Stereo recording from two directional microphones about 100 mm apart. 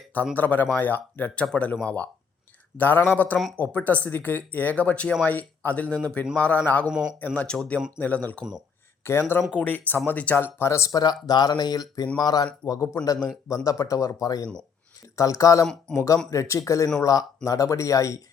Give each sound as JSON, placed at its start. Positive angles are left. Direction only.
{"t": 0.3, "sound": "speech", "side_deg": 15}
{"t": 6.9, "sound": "speech", "side_deg": -5}
{"t": 7.2, "sound": "speech", "side_deg": 10}
{"t": 15.9, "sound": "speech", "side_deg": 5}
{"t": 16.3, "sound": "speech", "side_deg": 30}